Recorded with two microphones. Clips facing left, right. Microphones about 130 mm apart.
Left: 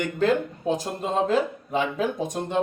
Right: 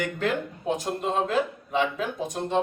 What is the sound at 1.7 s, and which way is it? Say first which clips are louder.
Speech: left 1 dB; 45° left (ahead or behind).